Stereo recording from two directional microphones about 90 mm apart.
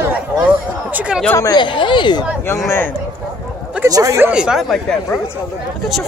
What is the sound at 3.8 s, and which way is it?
Speech, 40° right (ahead or behind).